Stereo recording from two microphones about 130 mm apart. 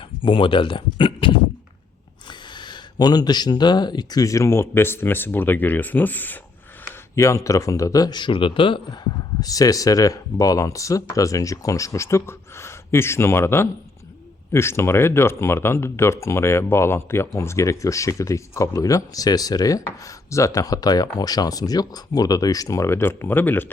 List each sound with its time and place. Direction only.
0.0 s speech: 40° left (ahead or behind); by 6.4 s 15° left (ahead or behind)
7.2 s speech: 25° left (ahead or behind); by 9.0 s 40° left (ahead or behind)
9.4 s speech: 25° left (ahead or behind)